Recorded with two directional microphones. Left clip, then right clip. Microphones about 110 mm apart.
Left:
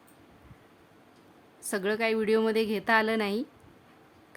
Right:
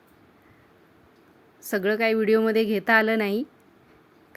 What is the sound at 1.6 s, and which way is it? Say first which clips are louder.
A woman's voice: right 5 dB; 30° right (ahead or behind).